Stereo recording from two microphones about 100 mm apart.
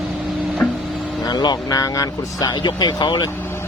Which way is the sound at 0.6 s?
5° left (ahead or behind).